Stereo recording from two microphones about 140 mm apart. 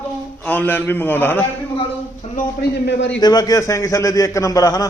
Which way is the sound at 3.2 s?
30° left (ahead or behind).